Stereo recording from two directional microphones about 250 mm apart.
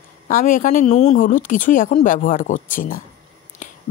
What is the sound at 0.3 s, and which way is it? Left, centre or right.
Speech, left.